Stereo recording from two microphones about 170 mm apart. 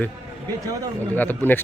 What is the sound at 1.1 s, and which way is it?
Speech, 10° left (ahead or behind).